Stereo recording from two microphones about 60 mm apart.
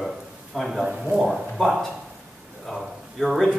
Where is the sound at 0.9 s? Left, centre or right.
Centre.